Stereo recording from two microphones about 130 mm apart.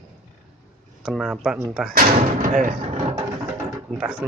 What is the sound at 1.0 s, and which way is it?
Speech, 5° right (ahead or behind).